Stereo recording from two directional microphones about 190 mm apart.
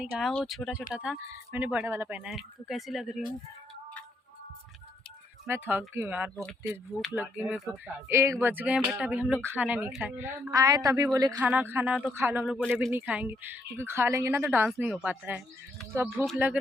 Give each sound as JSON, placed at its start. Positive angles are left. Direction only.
{"t": 0.0, "sound": "speech", "side_deg": -5}
{"t": 5.5, "sound": "speech", "side_deg": -10}